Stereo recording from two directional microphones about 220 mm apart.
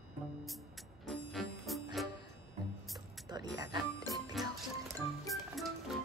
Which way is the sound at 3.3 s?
20° right (ahead or behind).